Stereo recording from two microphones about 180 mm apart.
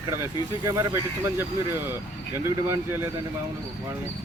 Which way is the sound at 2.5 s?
15° right (ahead or behind).